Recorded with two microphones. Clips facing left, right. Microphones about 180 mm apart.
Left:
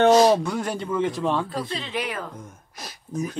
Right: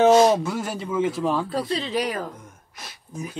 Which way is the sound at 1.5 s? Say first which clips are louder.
Right 4 dB; 40° right (ahead or behind).